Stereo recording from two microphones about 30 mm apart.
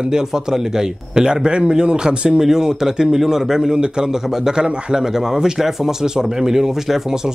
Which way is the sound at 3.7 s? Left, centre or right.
Right.